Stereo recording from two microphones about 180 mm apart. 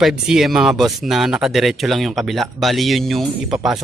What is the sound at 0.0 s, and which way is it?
A man's voice, centre (ahead or behind).